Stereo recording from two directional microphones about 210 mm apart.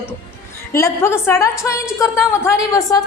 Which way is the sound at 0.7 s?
10° left (ahead or behind).